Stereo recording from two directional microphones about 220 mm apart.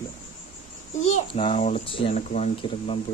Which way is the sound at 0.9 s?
30° left (ahead or behind).